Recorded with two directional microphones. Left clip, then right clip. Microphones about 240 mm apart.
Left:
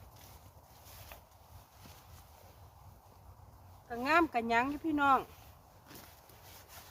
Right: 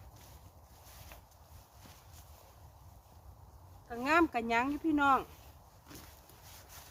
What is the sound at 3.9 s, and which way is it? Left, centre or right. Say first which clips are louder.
Speech: even; centre.